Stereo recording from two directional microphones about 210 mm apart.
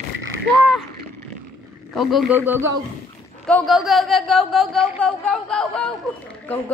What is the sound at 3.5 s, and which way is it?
A woman's voice, 5° left (ahead or behind).